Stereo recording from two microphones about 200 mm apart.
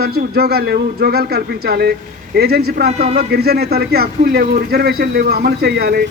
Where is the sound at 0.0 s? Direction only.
50° right (ahead or behind).